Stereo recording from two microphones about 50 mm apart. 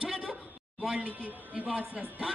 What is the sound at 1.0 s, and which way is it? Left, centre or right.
A man's voice, right.